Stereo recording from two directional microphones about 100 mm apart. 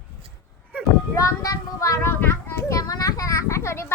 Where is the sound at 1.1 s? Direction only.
35° left (ahead or behind).